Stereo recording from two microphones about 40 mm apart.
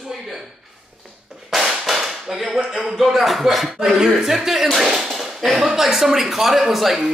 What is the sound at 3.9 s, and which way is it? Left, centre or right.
Speech, centre.